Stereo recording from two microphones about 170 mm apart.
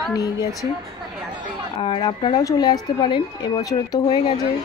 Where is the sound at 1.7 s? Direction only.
30° left (ahead or behind).